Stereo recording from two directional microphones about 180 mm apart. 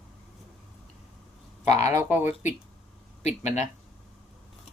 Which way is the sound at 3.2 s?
40° left (ahead or behind).